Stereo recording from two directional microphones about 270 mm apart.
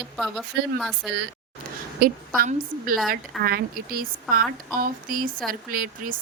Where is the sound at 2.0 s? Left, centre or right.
Right.